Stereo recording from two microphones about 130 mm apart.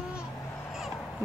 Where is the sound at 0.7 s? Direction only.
Centre (ahead or behind).